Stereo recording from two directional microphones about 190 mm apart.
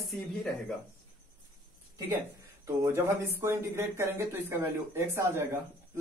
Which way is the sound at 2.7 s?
15° right (ahead or behind).